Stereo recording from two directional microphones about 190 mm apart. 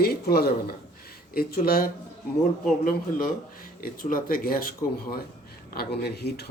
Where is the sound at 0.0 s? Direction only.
55° left (ahead or behind).